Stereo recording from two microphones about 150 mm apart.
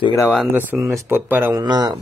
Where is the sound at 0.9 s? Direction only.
15° right (ahead or behind).